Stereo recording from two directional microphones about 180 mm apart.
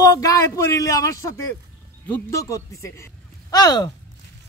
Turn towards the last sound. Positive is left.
turn(degrees=20)  # may be behind; listen again after turning